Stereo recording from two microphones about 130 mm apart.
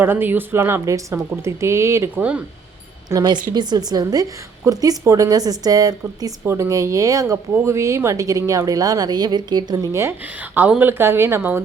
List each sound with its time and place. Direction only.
0.0 s speech: 15° right (ahead or behind)